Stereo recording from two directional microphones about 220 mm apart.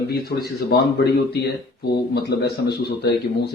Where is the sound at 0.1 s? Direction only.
45° left (ahead or behind).